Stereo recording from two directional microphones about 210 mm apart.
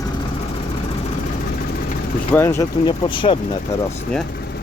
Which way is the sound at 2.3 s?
10° left (ahead or behind).